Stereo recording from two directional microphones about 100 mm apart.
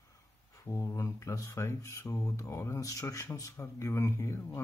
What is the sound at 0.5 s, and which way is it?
Speech, 30° left (ahead or behind).